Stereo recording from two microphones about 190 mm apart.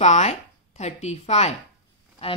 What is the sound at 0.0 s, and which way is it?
A woman's voice, 35° left (ahead or behind).